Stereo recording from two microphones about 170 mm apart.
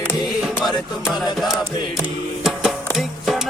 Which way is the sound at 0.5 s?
Centre (ahead or behind).